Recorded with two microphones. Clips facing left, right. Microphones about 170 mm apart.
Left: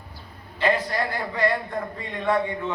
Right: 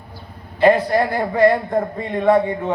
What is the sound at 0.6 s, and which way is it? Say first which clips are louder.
A man's voice: right 9 dB; 50° right (ahead or behind).